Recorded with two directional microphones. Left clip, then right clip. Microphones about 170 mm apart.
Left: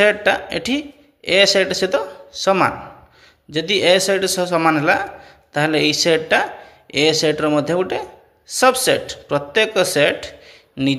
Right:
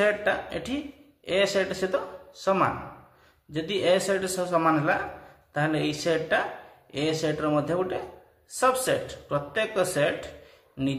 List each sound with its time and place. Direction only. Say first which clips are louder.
0.0 s a man's voice: left 9 dB; 35° left (ahead or behind)